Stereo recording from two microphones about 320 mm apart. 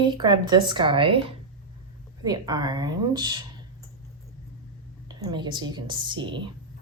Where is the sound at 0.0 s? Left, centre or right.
Centre.